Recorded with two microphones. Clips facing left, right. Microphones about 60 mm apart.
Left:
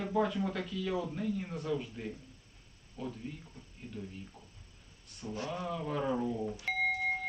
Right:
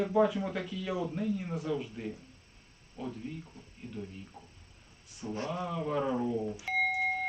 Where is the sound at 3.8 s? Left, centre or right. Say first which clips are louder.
Right 2 dB; right.